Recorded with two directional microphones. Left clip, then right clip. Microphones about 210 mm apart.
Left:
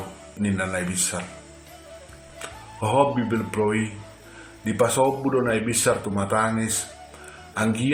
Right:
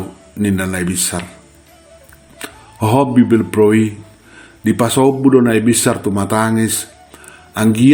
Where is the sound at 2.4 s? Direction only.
45° right (ahead or behind).